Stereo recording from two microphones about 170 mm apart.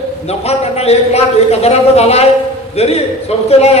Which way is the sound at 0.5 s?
40° left (ahead or behind).